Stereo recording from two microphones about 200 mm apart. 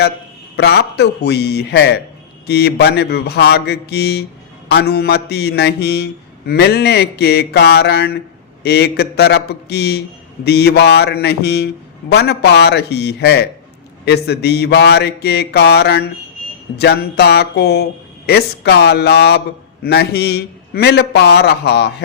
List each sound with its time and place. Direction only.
0.5 s mantra: 55° left (ahead or behind)